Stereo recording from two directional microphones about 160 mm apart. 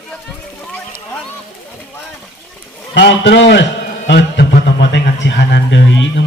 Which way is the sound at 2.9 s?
90° left.